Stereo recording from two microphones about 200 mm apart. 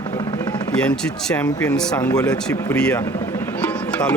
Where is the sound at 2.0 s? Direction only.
20° left (ahead or behind).